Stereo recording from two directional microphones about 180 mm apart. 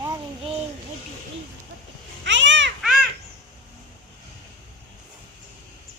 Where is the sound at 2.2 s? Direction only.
90° right.